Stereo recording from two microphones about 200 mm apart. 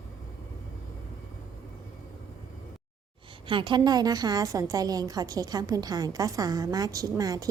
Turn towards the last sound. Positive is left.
turn(degrees=-20)  # may be behind; listen again after turning